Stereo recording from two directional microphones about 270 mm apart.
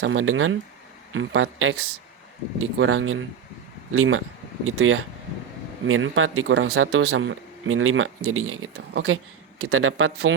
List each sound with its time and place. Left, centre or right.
0.0 s speech: right